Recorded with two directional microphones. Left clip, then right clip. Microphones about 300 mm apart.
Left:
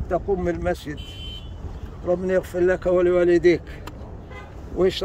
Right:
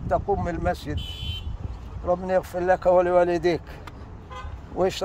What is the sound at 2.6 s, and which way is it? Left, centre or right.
Speech, centre.